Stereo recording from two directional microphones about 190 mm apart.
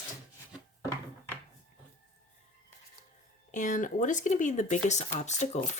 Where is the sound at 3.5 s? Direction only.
40° left (ahead or behind).